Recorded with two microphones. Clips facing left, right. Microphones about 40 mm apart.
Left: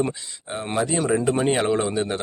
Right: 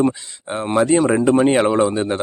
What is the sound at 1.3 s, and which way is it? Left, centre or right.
Speech, centre.